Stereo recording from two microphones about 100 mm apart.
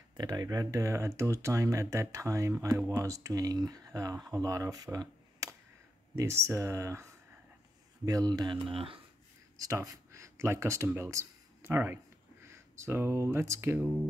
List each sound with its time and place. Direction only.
0.2 s speech: 40° right (ahead or behind)
8.6 s speech: 65° right (ahead or behind)
9.6 s speech: 35° right (ahead or behind)